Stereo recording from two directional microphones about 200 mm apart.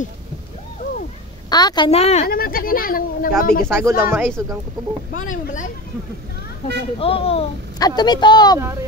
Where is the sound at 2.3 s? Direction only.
45° left (ahead or behind).